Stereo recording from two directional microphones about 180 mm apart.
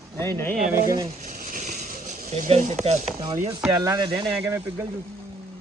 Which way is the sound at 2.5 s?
40° right (ahead or behind).